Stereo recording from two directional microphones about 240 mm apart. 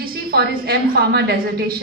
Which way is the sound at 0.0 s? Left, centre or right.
Right.